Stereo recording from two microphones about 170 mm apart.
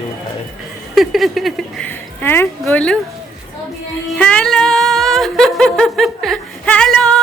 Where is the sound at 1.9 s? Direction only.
10° left (ahead or behind).